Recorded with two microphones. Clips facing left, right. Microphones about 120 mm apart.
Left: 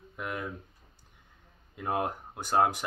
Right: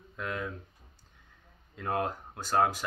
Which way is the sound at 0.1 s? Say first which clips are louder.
Right 1 dB; 15° left (ahead or behind).